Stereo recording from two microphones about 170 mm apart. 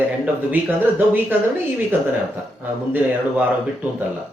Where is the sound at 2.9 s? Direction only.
10° right (ahead or behind).